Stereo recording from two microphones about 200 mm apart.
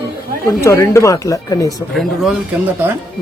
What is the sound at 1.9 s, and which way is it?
Speech, centre (ahead or behind).